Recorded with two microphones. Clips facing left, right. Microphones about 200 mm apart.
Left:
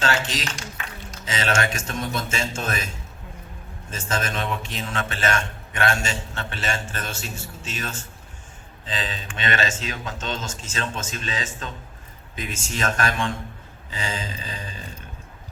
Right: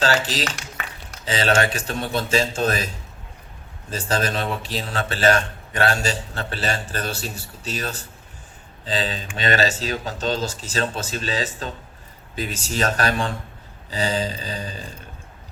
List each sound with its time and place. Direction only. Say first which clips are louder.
0.0 s a man's voice: right 3 dB; 35° right (ahead or behind)